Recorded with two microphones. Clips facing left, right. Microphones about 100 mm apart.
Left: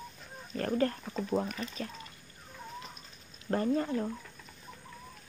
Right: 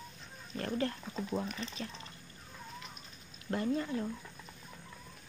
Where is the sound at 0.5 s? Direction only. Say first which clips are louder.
Left 5 dB; 45° left (ahead or behind).